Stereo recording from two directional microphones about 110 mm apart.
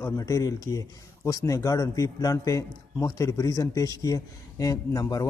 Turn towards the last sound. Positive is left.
turn(degrees=35)  # may be behind; listen again after turning